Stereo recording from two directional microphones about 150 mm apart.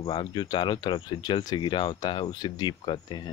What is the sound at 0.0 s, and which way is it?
Speech, 30° left (ahead or behind).